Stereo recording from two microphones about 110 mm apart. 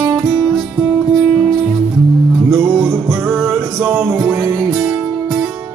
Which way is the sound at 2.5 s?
15° right (ahead or behind).